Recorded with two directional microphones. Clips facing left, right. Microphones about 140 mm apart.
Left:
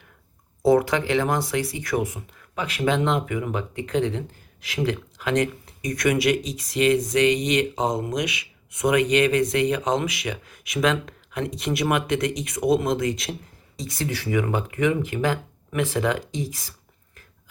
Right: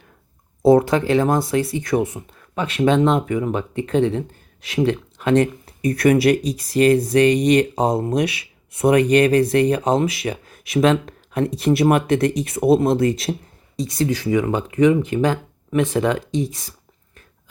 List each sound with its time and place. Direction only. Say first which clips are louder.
0.6 s speech: right 5 dB; 25° right (ahead or behind)